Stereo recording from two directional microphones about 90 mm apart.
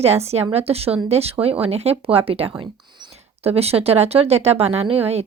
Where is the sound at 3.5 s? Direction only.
90° right.